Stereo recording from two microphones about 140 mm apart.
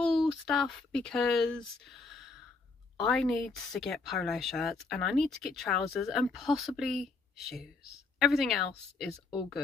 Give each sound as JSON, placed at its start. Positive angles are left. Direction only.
{"t": 0.3, "sound": "speech", "side_deg": 0}